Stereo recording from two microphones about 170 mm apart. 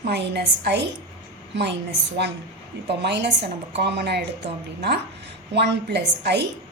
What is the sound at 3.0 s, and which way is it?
A woman's voice, 85° right.